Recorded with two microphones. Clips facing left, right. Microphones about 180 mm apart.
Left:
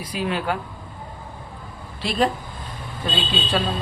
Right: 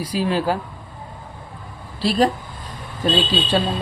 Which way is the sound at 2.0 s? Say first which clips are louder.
Right 4 dB; 35° right (ahead or behind).